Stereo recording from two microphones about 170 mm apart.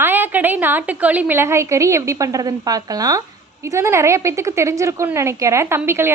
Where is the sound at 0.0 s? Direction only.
10° right (ahead or behind).